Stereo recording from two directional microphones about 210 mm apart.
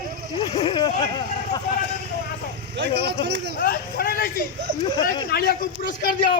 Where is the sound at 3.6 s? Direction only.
45° left (ahead or behind).